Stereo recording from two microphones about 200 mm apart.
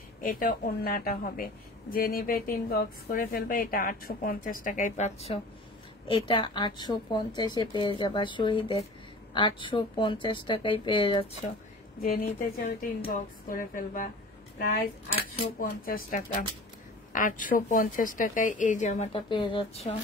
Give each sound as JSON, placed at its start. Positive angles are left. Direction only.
{"t": 0.2, "sound": "a woman's voice", "side_deg": 45}
{"t": 12.0, "sound": "speech", "side_deg": 45}
{"t": 15.6, "sound": "speech", "side_deg": 45}